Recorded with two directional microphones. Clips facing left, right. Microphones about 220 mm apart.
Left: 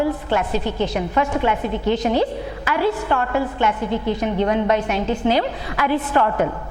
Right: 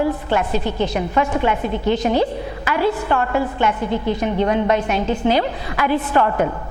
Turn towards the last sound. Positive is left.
turn(degrees=-20)  # may be behind; listen again after turning